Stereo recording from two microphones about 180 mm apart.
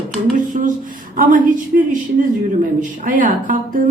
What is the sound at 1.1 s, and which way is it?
Speech, 50° right (ahead or behind).